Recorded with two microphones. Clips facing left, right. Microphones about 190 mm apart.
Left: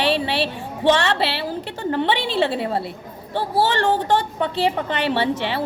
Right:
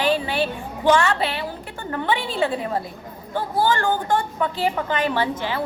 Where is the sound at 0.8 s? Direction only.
30° left (ahead or behind).